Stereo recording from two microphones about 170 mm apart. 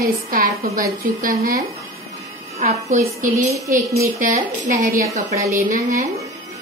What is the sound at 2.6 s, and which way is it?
Speech, 45° right (ahead or behind).